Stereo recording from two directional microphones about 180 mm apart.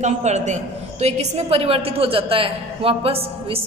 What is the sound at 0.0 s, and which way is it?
A woman's voice, 40° right (ahead or behind).